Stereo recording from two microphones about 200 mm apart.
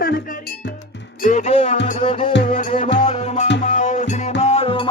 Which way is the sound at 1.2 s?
40° left (ahead or behind).